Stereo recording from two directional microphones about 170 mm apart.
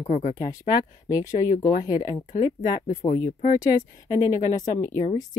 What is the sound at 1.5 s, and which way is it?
Speech, 50° left (ahead or behind).